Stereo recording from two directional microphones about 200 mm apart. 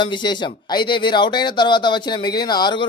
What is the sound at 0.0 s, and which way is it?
A man's voice, 25° left (ahead or behind).